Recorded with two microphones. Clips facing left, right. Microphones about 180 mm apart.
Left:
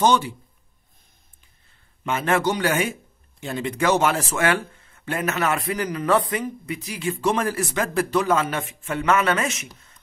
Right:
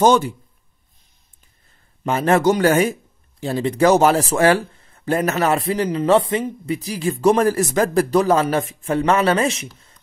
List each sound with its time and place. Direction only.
0.0 s speech: 45° right (ahead or behind)
2.0 s a man's voice: 40° right (ahead or behind)